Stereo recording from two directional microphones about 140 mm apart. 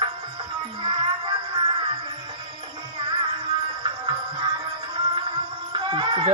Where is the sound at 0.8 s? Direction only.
40° right (ahead or behind).